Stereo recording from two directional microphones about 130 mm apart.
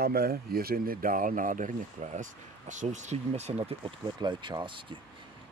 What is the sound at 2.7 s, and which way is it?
Speech, 70° right (ahead or behind).